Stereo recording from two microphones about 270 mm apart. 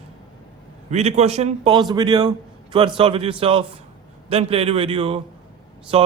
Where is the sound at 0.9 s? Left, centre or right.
Right.